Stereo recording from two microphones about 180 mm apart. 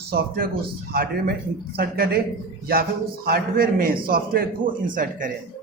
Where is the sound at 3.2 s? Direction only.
55° right (ahead or behind).